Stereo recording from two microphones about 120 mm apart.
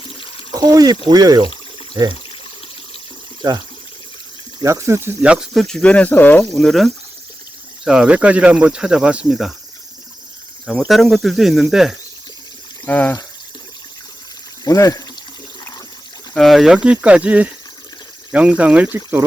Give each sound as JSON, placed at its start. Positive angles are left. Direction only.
{"t": 0.1, "sound": "a sound", "side_deg": 45}
{"t": 0.5, "sound": "speech", "side_deg": -30}
{"t": 4.6, "sound": "speech", "side_deg": -25}
{"t": 5.2, "sound": "speech", "side_deg": -5}
{"t": 5.6, "sound": "speech", "side_deg": 5}
{"t": 6.5, "sound": "speech", "side_deg": 0}
{"t": 7.9, "sound": "speech", "side_deg": -10}
{"t": 10.7, "sound": "speech", "side_deg": 0}
{"t": 12.8, "sound": "speech", "side_deg": 15}
{"t": 14.6, "sound": "speech", "side_deg": 30}
{"t": 16.3, "sound": "speech", "side_deg": 0}